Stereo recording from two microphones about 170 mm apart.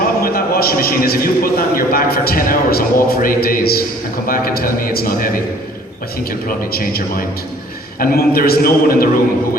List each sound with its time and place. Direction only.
0.2 s a man's voice: 60° left (ahead or behind)
6.7 s a man's voice: 65° left (ahead or behind)